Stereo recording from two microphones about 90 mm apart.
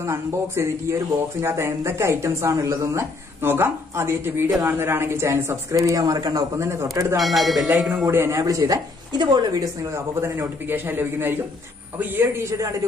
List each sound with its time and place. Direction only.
0.0 s a man's voice: 30° right (ahead or behind); by 6.7 s 45° right (ahead or behind)
7.2 s speech: centre (ahead or behind)
8.0 s a man's voice: 30° right (ahead or behind); by 9.7 s 50° right (ahead or behind)
9.9 s a man's voice: 35° right (ahead or behind)